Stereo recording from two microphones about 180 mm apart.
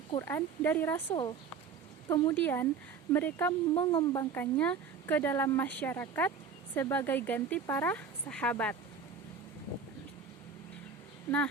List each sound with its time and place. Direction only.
0.2 s speech: 10° left (ahead or behind)
1.1 s speech: 25° left (ahead or behind)
3.8 s speech: 25° left (ahead or behind); by 8.7 s 5° left (ahead or behind)